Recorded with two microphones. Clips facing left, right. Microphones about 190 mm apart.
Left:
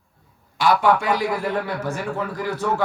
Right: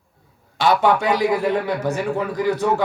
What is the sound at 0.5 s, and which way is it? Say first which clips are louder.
A man's voice: right 1 dB; 25° right (ahead or behind).